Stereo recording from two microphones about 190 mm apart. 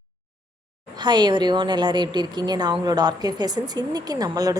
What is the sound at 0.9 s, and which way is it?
A woman's voice, 25° right (ahead or behind).